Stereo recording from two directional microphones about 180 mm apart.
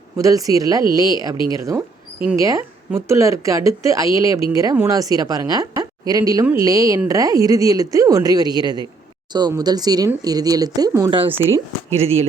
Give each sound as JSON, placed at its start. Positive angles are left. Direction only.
{"t": 0.2, "sound": "a woman's voice", "side_deg": -20}
{"t": 1.4, "sound": "speech", "side_deg": 25}
{"t": 2.4, "sound": "a woman's voice", "side_deg": -15}
{"t": 11.9, "sound": "speech", "side_deg": -35}